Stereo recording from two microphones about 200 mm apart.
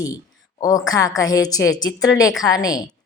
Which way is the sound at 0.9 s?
15° left (ahead or behind).